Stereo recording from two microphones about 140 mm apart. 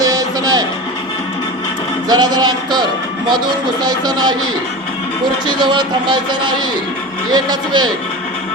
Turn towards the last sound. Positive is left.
turn(degrees=-30)  # may be behind; listen again after turning